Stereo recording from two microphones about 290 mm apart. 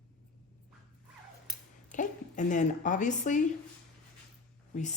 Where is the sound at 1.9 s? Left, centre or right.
Left.